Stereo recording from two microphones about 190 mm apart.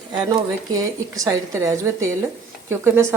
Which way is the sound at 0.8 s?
15° right (ahead or behind).